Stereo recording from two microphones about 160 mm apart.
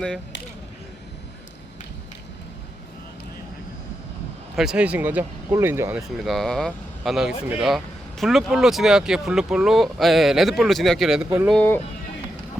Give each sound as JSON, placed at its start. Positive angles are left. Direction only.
{"t": 4.5, "sound": "speech", "side_deg": -5}
{"t": 6.1, "sound": "speech", "side_deg": 0}
{"t": 11.5, "sound": "speech", "side_deg": 10}